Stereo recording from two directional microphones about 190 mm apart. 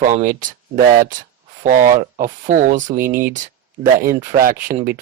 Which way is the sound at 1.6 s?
45° right (ahead or behind).